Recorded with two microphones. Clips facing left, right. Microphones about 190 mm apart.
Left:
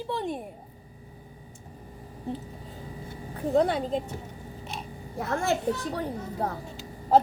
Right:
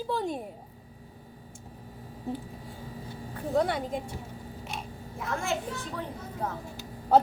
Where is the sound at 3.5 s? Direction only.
25° left (ahead or behind).